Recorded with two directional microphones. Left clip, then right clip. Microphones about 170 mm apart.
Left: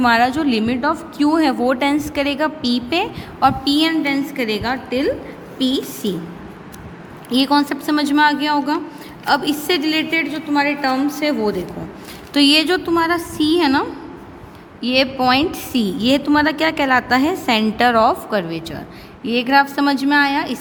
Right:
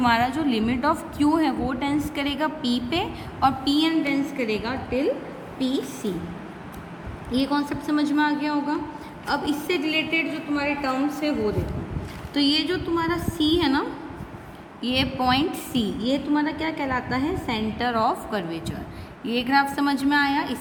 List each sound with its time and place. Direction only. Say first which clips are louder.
0.0 s a woman's voice: left 6 dB; 25° left (ahead or behind)
0.6 s a woman's voice: left 4 dB; 15° left (ahead or behind); by 6.1 s 45° left (ahead or behind)
7.3 s a woman's voice: left 9 dB; 45° left (ahead or behind); by 16.0 s 30° left (ahead or behind)
16.0 s a woman's voice: left 10 dB; 50° left (ahead or behind); by 20.6 s 35° left (ahead or behind)